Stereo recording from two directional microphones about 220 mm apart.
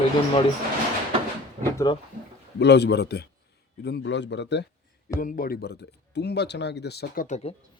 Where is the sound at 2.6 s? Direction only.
50° left (ahead or behind).